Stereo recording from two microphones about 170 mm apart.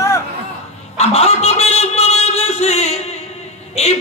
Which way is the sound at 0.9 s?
40° left (ahead or behind).